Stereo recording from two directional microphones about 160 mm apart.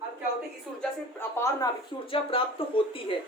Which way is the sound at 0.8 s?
15° left (ahead or behind).